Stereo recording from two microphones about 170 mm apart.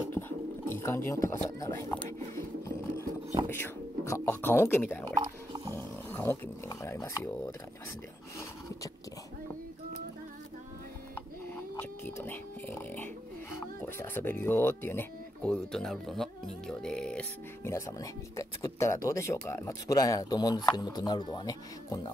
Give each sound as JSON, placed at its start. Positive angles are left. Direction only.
{"t": 0.7, "sound": "speech", "side_deg": 15}
{"t": 2.3, "sound": "a sound", "side_deg": 15}
{"t": 3.4, "sound": "speech", "side_deg": 15}
{"t": 5.1, "sound": "a sound", "side_deg": -25}
{"t": 5.8, "sound": "roaring cats", "side_deg": 10}
{"t": 6.7, "sound": "speech", "side_deg": 20}
{"t": 11.8, "sound": "speech", "side_deg": 10}
{"t": 17.6, "sound": "speech", "side_deg": 15}